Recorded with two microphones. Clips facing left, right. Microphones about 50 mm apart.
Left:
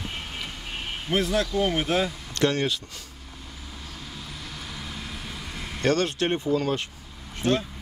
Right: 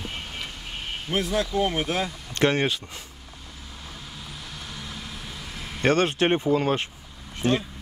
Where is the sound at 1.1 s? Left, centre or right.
Centre.